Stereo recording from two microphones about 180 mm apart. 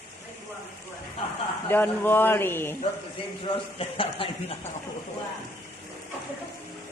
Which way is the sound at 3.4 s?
30° left (ahead or behind).